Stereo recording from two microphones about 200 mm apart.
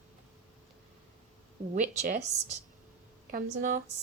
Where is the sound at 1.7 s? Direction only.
35° right (ahead or behind).